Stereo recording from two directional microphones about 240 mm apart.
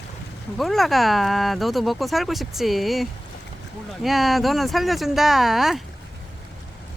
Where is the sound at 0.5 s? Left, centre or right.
Centre.